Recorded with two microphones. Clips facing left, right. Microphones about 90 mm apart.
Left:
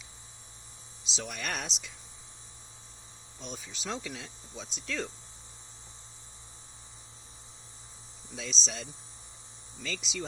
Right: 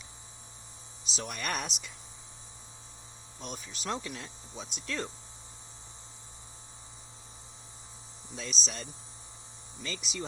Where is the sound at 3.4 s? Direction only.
50° right (ahead or behind).